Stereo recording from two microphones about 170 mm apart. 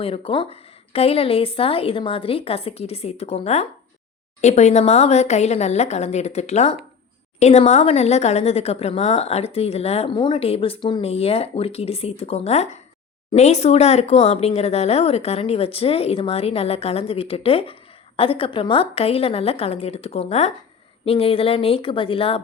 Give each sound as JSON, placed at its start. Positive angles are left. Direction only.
{"t": 0.0, "sound": "a woman's voice", "side_deg": 35}